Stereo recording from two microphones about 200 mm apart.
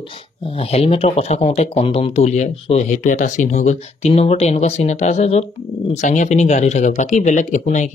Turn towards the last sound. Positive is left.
turn(degrees=35)  # may be behind; listen again after turning